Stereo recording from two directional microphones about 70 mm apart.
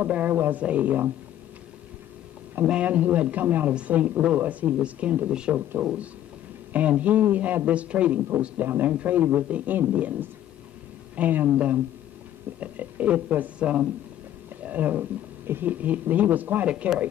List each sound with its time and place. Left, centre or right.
0.0 s a man's voice: right
2.6 s a man's voice: centre